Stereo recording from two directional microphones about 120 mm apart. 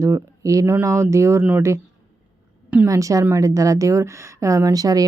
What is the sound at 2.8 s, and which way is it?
A woman's voice, 25° right (ahead or behind).